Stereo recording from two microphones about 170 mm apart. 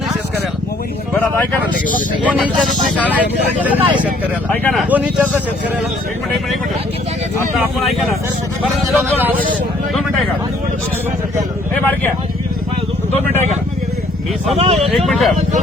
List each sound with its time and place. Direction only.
1.1 s speech: 10° left (ahead or behind)
2.2 s speech: 5° right (ahead or behind)
3.2 s speech: 10° right (ahead or behind)
9.1 s speech: 10° right (ahead or behind)
11.8 s speech: 10° left (ahead or behind)
14.5 s speech: 35° right (ahead or behind)
14.8 s speech: centre (ahead or behind)